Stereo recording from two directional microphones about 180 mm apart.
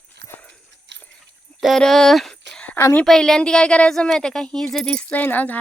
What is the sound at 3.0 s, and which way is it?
Speech, centre (ahead or behind).